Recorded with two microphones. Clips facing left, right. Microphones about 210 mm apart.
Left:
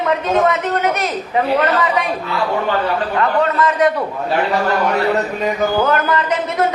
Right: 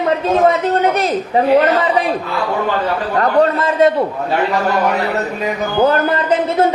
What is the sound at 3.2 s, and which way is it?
Speech, 35° right (ahead or behind).